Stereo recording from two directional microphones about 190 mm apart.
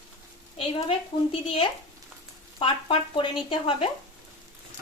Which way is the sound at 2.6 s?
25° left (ahead or behind).